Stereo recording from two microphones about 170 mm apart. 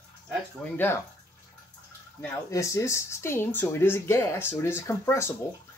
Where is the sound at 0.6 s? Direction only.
Centre (ahead or behind).